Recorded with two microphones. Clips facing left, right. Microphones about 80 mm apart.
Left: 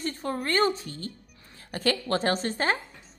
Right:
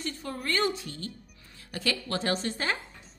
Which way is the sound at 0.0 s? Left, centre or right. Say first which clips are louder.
Left 4 dB; left.